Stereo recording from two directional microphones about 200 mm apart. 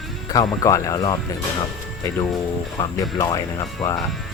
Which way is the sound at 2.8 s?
10° left (ahead or behind).